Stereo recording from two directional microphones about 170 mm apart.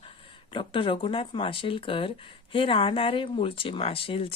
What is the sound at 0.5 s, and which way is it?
Speech, 30° left (ahead or behind).